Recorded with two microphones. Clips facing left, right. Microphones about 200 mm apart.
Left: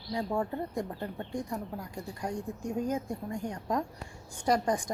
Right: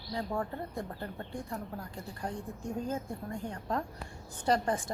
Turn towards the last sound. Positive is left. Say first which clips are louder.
# left 2 dB
turn(degrees=15)  # may be behind; listen again after turning